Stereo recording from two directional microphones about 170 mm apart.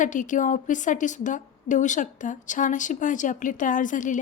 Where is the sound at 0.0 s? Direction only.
50° left (ahead or behind).